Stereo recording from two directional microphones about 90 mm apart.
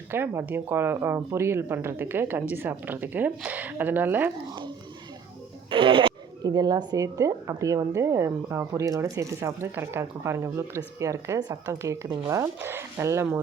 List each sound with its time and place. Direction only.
0.1 s speech: 25° right (ahead or behind)
5.7 s speech: 75° right (ahead or behind)
6.4 s a woman's voice: 45° right (ahead or behind)
12.0 s speech: 55° right (ahead or behind)
12.3 s a woman's voice: 30° right (ahead or behind)